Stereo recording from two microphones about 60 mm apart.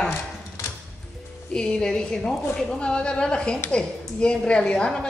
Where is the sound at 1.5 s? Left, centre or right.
Centre.